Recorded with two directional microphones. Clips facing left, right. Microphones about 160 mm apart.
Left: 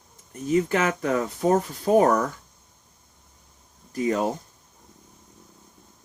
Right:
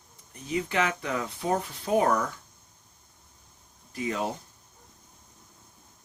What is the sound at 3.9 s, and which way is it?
Speech, 40° left (ahead or behind).